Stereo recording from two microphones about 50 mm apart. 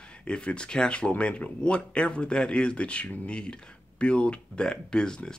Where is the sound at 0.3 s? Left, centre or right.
Centre.